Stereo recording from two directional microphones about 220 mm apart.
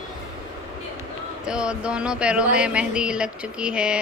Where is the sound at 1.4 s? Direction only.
5° right (ahead or behind).